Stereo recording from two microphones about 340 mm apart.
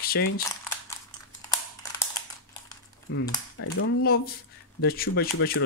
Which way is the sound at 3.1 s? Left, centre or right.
Left.